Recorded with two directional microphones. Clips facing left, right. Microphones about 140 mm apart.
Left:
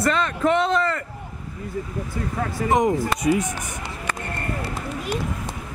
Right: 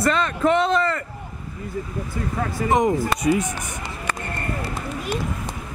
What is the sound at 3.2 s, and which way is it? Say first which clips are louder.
Speech: even; centre (ahead or behind).